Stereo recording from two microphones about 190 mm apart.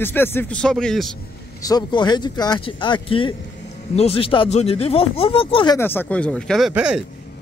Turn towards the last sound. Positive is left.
turn(degrees=-5)  # may be behind; listen again after turning